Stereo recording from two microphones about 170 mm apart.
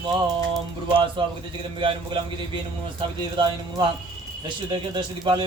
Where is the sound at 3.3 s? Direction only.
30° right (ahead or behind).